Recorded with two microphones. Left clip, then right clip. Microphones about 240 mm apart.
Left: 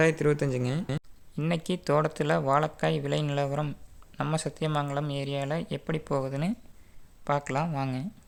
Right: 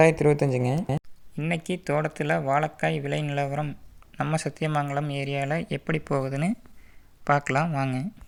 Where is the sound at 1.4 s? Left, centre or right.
Centre.